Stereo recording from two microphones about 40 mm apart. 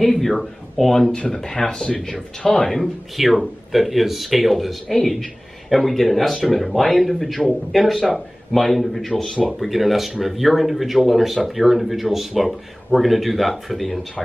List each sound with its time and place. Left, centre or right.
0.0 s speech: centre
2.5 s speech: centre
4.8 s speech: centre